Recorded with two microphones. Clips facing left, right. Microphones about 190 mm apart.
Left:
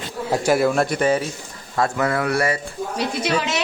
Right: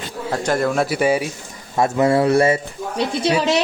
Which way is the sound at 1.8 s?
20° right (ahead or behind).